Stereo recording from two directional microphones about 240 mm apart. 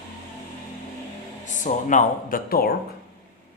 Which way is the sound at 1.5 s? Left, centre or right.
Left.